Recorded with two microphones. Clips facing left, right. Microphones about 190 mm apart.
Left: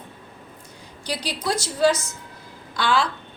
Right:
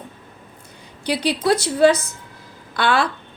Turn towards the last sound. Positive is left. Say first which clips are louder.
# right 3 dB
turn(degrees=-60)  # may be behind; listen again after turning